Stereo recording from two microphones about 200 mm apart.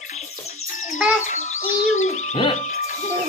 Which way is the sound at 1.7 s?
35° left (ahead or behind).